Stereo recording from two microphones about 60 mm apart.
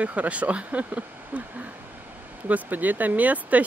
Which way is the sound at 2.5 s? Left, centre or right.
Right.